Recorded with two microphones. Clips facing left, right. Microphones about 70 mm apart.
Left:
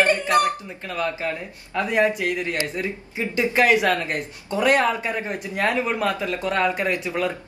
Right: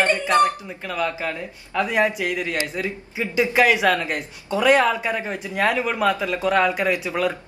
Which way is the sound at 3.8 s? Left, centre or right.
Centre.